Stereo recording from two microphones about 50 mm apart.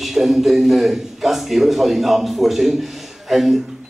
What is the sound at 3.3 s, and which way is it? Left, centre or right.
Speech, centre.